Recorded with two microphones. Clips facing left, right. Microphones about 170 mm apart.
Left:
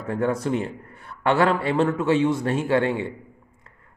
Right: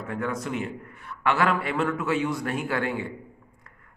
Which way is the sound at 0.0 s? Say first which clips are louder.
Left 6 dB; 35° left (ahead or behind).